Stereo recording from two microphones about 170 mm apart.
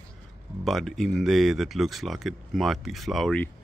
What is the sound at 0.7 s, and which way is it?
Speech, centre (ahead or behind).